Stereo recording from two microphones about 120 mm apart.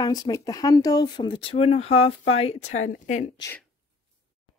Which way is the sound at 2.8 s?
85° left.